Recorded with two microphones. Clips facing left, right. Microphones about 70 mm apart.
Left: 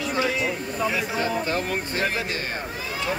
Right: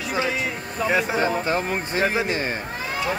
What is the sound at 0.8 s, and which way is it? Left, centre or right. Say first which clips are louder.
Speech: right 5 dB; right.